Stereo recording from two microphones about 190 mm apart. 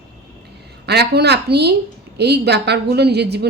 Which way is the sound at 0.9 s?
60° right (ahead or behind).